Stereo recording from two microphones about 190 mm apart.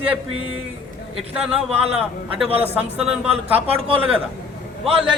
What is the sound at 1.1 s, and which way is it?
Speech, 5° right (ahead or behind).